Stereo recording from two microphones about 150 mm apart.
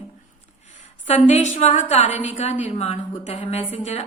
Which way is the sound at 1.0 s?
50° left (ahead or behind).